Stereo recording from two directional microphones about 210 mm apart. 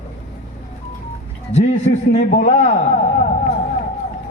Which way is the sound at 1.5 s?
35° left (ahead or behind).